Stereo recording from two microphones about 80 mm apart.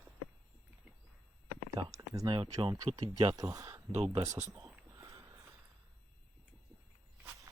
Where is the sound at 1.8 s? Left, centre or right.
Right.